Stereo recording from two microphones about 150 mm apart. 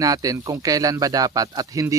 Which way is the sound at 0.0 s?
25° right (ahead or behind).